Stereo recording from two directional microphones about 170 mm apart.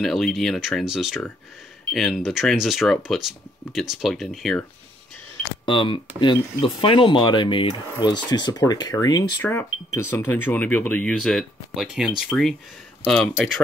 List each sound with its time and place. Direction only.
0.0 s speech: centre (ahead or behind)
5.7 s speech: 30° left (ahead or behind); by 13.5 s centre (ahead or behind)